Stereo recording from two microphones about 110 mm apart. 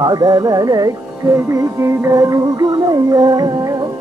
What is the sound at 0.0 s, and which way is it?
Music, 35° right (ahead or behind).